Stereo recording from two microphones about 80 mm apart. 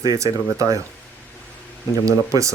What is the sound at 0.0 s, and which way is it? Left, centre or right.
Speech, right.